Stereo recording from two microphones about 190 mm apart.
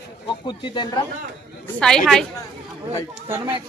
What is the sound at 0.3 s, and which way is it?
Speech, 25° left (ahead or behind).